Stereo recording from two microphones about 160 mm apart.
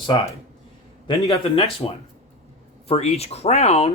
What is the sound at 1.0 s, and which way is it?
Speech, 35° left (ahead or behind).